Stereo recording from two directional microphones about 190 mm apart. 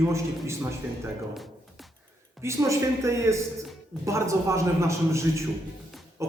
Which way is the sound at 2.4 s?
15° right (ahead or behind).